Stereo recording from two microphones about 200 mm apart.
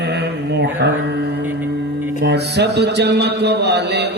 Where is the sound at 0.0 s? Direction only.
55° right (ahead or behind).